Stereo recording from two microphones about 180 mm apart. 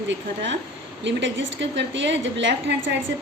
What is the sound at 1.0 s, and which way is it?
A woman's voice, 85° right.